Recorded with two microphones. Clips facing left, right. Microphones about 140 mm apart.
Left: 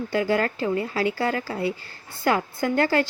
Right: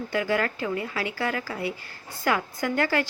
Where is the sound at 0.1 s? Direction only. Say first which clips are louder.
Left 3 dB; 30° left (ahead or behind).